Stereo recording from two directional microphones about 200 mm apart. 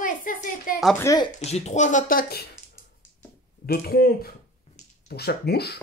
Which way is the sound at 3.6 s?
50° left (ahead or behind).